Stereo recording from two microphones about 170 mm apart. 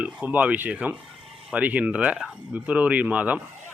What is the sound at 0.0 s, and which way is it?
Speech, 10° right (ahead or behind).